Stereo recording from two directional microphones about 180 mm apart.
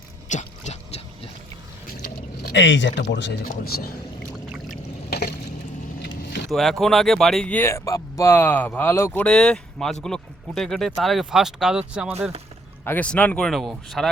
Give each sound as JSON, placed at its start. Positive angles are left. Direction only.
{"t": 0.3, "sound": "a sound", "side_deg": 40}
{"t": 2.4, "sound": "speech", "side_deg": 75}
{"t": 3.5, "sound": "speech", "side_deg": 55}
{"t": 6.0, "sound": "vehicle", "side_deg": 65}
{"t": 6.5, "sound": "speech", "side_deg": 0}
{"t": 12.8, "sound": "speech", "side_deg": 10}